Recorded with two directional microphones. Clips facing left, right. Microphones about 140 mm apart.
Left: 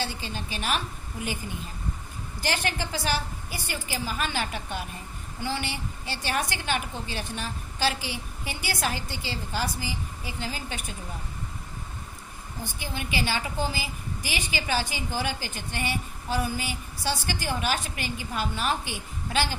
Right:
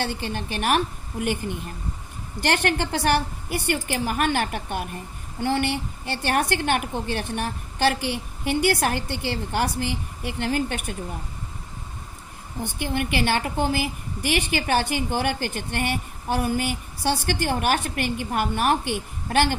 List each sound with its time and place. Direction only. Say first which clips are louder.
0.0 s a woman's voice: right 5 dB; 55° right (ahead or behind)
12.6 s a woman's voice: right 9 dB; 60° right (ahead or behind)